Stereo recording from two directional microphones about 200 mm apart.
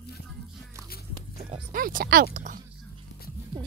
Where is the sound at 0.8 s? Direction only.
50° left (ahead or behind).